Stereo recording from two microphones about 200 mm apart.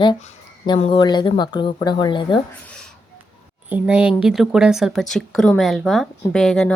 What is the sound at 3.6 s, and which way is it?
A woman's voice, 5° right (ahead or behind).